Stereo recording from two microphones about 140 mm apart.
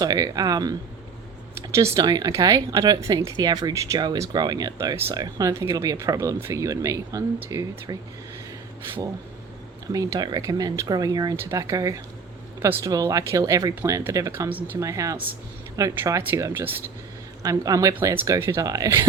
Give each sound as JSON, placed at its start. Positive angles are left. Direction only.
{"t": 0.0, "sound": "speech", "side_deg": -25}
{"t": 9.9, "sound": "speech", "side_deg": -25}